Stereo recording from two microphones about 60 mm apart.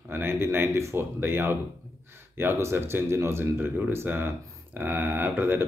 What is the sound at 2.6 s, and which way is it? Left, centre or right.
Speech, right.